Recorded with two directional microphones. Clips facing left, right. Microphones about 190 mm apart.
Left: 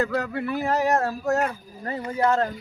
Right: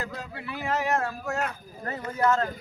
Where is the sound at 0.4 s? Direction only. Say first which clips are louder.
Left 3 dB; 40° left (ahead or behind).